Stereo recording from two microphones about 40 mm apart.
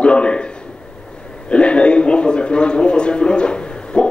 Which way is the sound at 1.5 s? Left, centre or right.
Left.